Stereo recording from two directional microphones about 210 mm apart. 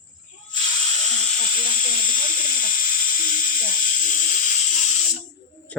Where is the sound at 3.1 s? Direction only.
40° left (ahead or behind).